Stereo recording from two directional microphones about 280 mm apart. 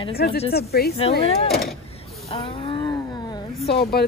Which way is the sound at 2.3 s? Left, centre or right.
Left.